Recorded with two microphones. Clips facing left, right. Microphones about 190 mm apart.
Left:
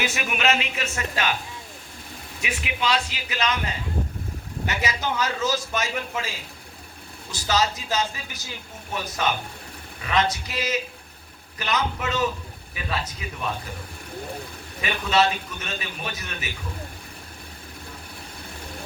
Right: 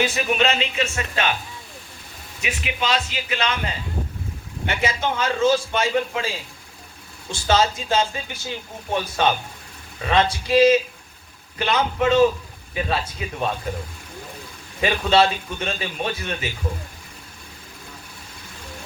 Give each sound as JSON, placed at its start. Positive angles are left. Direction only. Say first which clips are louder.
{"t": 0.0, "sound": "speech", "louder": "right 4 dB", "side_deg": -30}
{"t": 2.4, "sound": "speech", "louder": "right 1 dB", "side_deg": -25}
{"t": 4.6, "sound": "speech", "louder": "right 4 dB", "side_deg": -25}
{"t": 14.8, "sound": "speech", "louder": "right 4 dB", "side_deg": -30}